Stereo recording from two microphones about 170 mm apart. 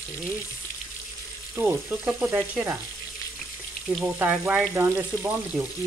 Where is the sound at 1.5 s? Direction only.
15° right (ahead or behind).